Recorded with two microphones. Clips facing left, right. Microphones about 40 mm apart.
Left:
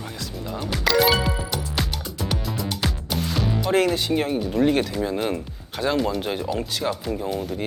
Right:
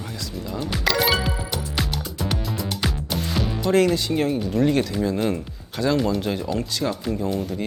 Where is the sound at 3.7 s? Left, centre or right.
Centre.